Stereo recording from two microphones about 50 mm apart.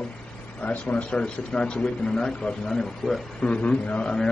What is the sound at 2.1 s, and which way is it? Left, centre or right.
A man's voice, centre.